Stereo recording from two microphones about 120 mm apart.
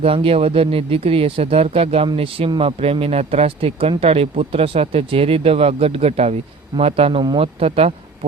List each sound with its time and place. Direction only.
0.0 s speech: 50° right (ahead or behind)